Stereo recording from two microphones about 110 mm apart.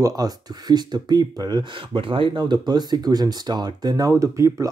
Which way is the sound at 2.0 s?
50° right (ahead or behind).